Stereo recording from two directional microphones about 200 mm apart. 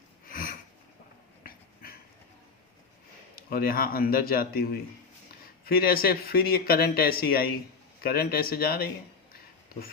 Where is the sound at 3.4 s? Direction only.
50° left (ahead or behind).